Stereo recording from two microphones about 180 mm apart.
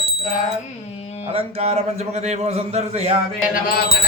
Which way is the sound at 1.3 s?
35° right (ahead or behind).